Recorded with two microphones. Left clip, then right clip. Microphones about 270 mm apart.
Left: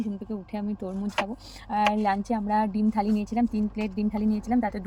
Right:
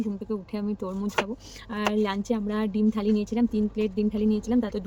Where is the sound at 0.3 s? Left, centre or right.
Centre.